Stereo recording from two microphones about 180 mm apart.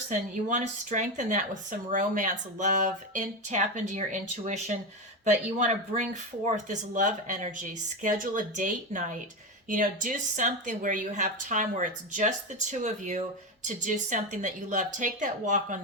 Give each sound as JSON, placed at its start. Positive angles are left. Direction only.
{"t": 0.1, "sound": "speech", "side_deg": -45}
{"t": 5.2, "sound": "speech", "side_deg": -40}